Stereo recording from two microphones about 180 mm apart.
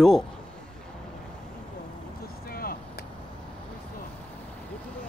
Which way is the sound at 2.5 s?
55° left (ahead or behind).